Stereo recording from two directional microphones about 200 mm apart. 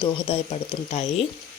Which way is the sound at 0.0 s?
25° left (ahead or behind).